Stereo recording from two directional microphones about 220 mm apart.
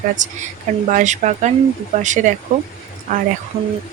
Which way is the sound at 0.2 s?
35° right (ahead or behind).